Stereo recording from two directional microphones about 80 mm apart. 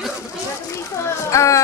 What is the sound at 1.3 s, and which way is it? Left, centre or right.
Music, left.